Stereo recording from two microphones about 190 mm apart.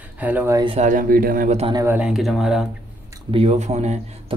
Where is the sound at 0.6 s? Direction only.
30° right (ahead or behind).